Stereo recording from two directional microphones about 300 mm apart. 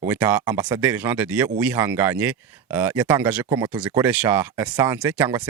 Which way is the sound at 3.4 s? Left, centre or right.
Centre.